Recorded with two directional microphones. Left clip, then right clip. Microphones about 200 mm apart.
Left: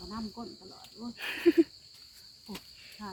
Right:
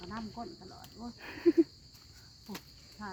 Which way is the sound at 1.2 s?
5° left (ahead or behind).